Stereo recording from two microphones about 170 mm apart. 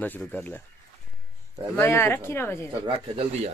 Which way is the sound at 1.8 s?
15° left (ahead or behind).